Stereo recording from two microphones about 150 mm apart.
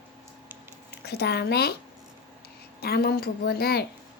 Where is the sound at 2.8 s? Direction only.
90° left.